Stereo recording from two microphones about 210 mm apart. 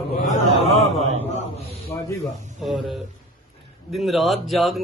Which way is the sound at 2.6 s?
Centre (ahead or behind).